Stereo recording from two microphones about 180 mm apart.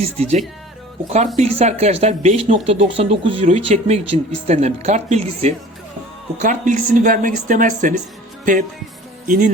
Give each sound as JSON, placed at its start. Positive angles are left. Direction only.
{"t": 0.0, "sound": "speech", "side_deg": -35}
{"t": 9.2, "sound": "speech", "side_deg": -45}